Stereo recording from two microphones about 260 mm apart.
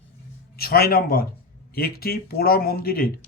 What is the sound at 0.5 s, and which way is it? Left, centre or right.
Speech, left.